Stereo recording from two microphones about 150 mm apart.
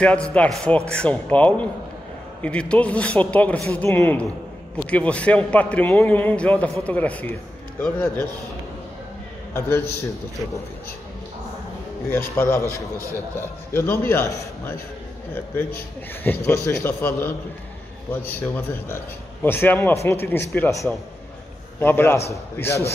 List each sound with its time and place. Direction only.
0.0 s a man's voice: 5° left (ahead or behind)
9.5 s a man's voice: 15° left (ahead or behind)
12.4 s a man's voice: 20° left (ahead or behind)
16.3 s a man's voice: 10° left (ahead or behind)